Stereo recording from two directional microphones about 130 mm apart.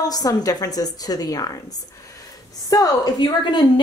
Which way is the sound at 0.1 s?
30° left (ahead or behind).